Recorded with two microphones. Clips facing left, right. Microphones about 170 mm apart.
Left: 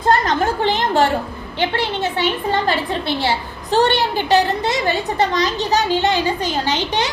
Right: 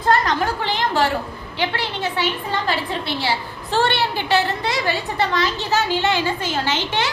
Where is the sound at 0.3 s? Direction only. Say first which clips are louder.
Left 4 dB; 20° left (ahead or behind).